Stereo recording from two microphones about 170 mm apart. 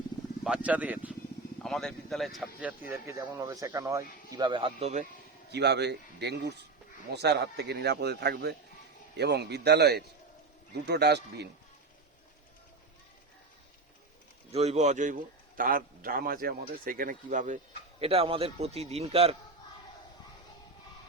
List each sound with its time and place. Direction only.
0.4 s speech: 5° right (ahead or behind)
1.6 s speech: centre (ahead or behind)
2.9 s speech: 15° right (ahead or behind); by 5.0 s 40° right (ahead or behind)
5.5 s speech: 80° right
14.5 s a man's voice: 35° right (ahead or behind)
18.0 s a man's voice: 35° right (ahead or behind)